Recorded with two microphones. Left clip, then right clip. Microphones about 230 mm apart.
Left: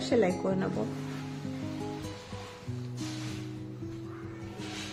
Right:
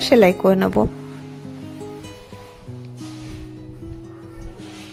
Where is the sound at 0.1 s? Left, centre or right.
Right.